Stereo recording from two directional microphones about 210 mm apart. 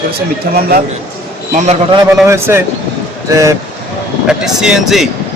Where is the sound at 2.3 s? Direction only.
10° right (ahead or behind).